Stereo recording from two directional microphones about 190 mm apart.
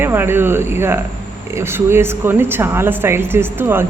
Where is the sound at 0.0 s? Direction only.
10° right (ahead or behind).